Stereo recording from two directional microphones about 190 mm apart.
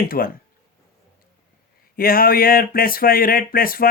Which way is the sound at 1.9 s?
50° left (ahead or behind).